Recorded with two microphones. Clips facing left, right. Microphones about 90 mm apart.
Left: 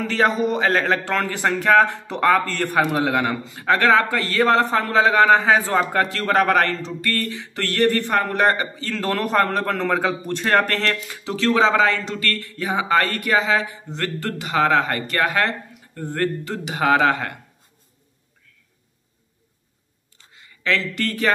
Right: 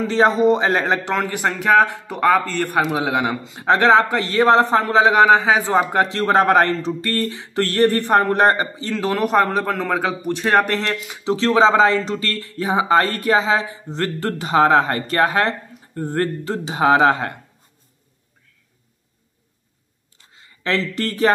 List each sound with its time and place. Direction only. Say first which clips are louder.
0.0 s a man's voice: right 4 dB; 25° right (ahead or behind)
3.6 s a man's voice: right 3 dB; 25° right (ahead or behind)
11.2 s speech: right 3 dB; 25° right (ahead or behind)
20.6 s speech: right 1 dB; 30° right (ahead or behind)